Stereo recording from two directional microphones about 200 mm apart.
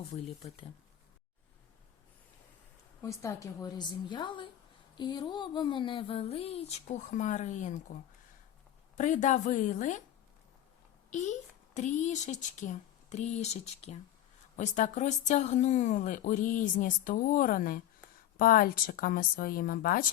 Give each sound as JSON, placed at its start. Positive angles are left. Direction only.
{"t": 0.1, "sound": "speech", "side_deg": 30}
{"t": 3.0, "sound": "speech", "side_deg": 15}
{"t": 9.0, "sound": "speech", "side_deg": 35}
{"t": 11.1, "sound": "speech", "side_deg": 35}